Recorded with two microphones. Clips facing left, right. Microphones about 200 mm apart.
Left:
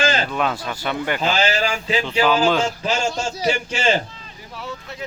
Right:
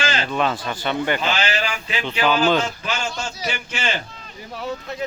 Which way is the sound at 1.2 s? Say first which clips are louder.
Left 3 dB; 35° left (ahead or behind).